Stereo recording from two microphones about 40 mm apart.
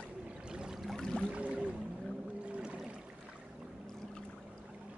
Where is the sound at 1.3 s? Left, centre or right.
Right.